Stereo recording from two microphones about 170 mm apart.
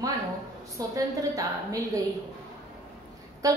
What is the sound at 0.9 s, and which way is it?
A woman's voice, 20° right (ahead or behind).